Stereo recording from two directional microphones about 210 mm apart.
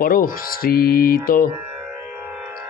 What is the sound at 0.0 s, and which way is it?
Mantra, 40° left (ahead or behind).